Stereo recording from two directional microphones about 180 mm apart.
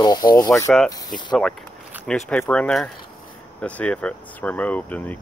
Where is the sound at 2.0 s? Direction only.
5° left (ahead or behind).